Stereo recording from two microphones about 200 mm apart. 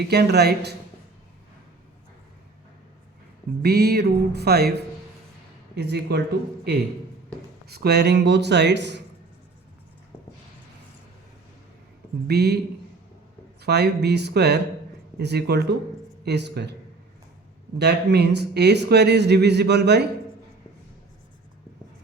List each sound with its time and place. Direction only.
0.1 s speech: 55° right (ahead or behind)
3.6 s music: 50° right (ahead or behind)
5.7 s speech: 55° right (ahead or behind)
7.7 s speech: 55° right (ahead or behind)
12.3 s speech: 55° right (ahead or behind)
13.6 s speech: 55° right (ahead or behind)
17.7 s speech: 55° right (ahead or behind)